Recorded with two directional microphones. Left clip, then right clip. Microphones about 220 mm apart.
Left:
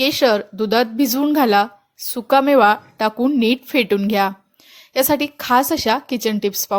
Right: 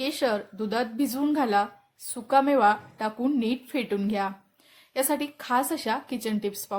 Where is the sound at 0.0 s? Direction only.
30° left (ahead or behind).